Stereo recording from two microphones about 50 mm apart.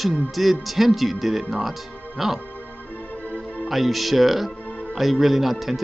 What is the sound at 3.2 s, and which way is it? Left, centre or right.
Music, left.